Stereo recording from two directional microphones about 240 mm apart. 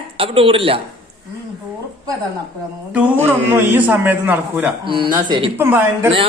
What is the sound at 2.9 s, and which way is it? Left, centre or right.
A man's voice, centre.